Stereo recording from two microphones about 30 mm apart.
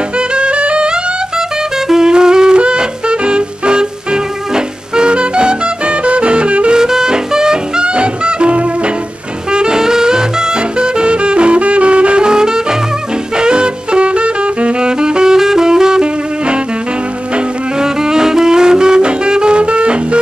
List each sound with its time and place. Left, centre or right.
0.3 s music: right
1.9 s music: right
6.7 s music: right
7.8 s music: right
9.5 s music: right
12.3 s music: right
13.4 s saxophone: right
15.3 s saxophone: centre
17.7 s music: right